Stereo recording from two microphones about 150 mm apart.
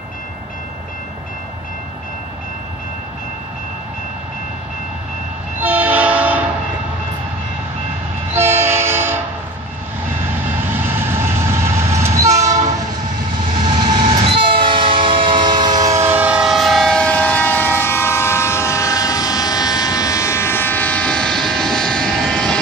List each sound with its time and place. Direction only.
5.6 s train: 10° right (ahead or behind)
8.3 s train: 15° right (ahead or behind)
10.6 s train: 15° right (ahead or behind)
12.3 s train: 50° right (ahead or behind)
13.7 s train: 30° right (ahead or behind); by 22.6 s 5° left (ahead or behind)